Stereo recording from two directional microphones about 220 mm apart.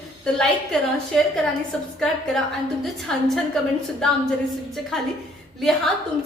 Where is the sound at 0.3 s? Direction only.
Centre (ahead or behind).